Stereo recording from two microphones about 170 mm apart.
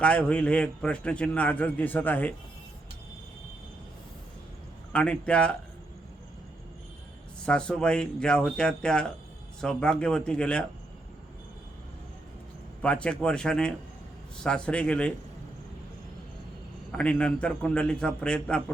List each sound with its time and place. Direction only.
0.0 s a man's voice: 5° left (ahead or behind)
4.9 s a man's voice: 5° left (ahead or behind)
7.4 s speech: 5° left (ahead or behind)
12.8 s a man's voice: 5° left (ahead or behind)
16.9 s speech: 5° left (ahead or behind)